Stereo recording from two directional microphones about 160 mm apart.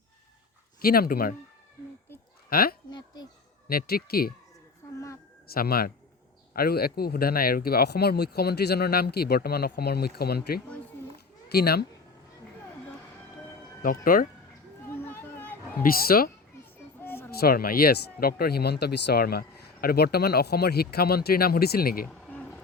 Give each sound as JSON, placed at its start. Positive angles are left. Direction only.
{"t": 0.8, "sound": "speech", "side_deg": 70}
{"t": 2.5, "sound": "speech", "side_deg": 70}
{"t": 5.5, "sound": "speech", "side_deg": 70}
{"t": 13.8, "sound": "speech", "side_deg": 60}
{"t": 14.8, "sound": "a sound", "side_deg": 15}
{"t": 15.8, "sound": "speech", "side_deg": 65}
{"t": 17.0, "sound": "a sound", "side_deg": 15}
{"t": 17.4, "sound": "speech", "side_deg": 65}
{"t": 22.0, "sound": "a sound", "side_deg": 5}